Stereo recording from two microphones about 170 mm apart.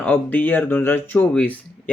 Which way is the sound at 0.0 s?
10° left (ahead or behind).